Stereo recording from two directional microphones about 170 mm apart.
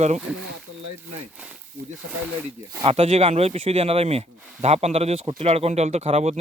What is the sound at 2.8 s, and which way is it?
Speech, 35° right (ahead or behind).